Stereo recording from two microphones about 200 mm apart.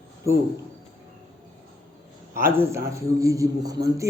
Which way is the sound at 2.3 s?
10° right (ahead or behind).